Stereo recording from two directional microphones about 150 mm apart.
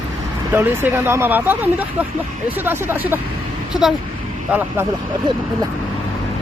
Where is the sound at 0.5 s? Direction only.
15° right (ahead or behind).